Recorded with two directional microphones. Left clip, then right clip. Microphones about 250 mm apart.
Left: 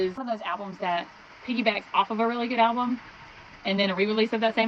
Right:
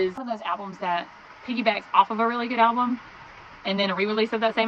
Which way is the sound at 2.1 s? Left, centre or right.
Right.